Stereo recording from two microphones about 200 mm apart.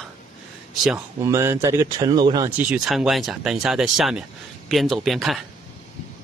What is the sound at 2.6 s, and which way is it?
Speech, 5° right (ahead or behind).